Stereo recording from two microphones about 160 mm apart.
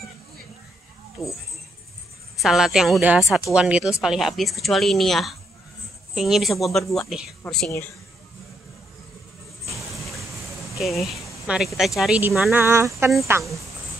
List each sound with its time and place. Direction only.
2.4 s a woman's voice: centre (ahead or behind)
10.8 s speech: centre (ahead or behind)
12.5 s speech: 15° right (ahead or behind)